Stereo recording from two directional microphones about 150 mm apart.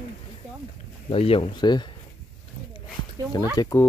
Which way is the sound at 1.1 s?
40° left (ahead or behind).